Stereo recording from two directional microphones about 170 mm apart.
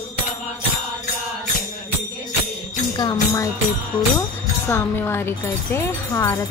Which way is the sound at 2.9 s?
20° left (ahead or behind).